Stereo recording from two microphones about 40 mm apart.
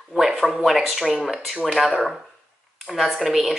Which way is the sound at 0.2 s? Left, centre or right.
Centre.